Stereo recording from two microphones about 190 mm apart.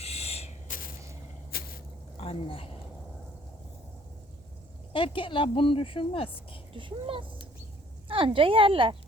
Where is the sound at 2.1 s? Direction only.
30° left (ahead or behind).